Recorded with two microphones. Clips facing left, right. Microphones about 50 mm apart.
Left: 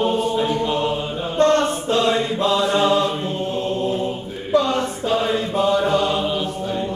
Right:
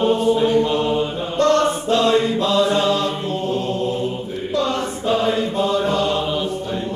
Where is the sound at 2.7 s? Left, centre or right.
Left.